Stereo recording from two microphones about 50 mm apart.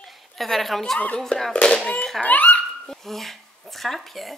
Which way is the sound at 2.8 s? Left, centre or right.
Centre.